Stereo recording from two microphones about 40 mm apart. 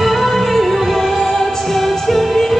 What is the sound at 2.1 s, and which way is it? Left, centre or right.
Music, centre.